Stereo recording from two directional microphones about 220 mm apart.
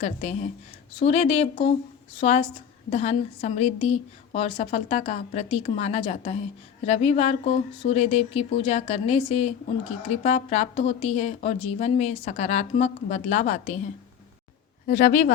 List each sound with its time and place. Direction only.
0.0 s a woman's voice: 30° left (ahead or behind)